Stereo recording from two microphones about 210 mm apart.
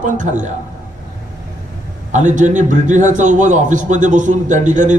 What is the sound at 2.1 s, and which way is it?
A man's voice, 35° right (ahead or behind).